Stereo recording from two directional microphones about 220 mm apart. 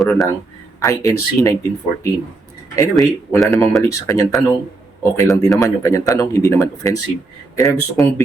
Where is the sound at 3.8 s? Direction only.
15° left (ahead or behind).